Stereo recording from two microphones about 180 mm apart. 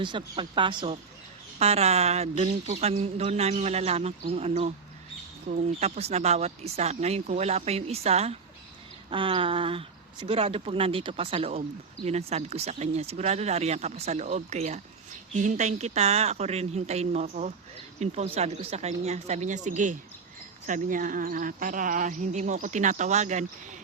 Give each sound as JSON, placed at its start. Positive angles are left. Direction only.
{"t": 0.0, "sound": "speech", "side_deg": -25}